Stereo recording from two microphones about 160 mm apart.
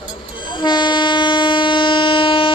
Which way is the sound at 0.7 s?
30° left (ahead or behind).